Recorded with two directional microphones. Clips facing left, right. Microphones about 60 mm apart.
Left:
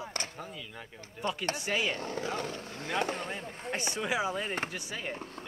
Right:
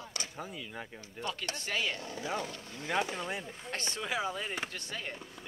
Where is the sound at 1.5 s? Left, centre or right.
Centre.